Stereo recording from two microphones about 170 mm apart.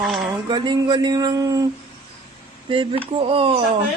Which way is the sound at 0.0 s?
Centre (ahead or behind).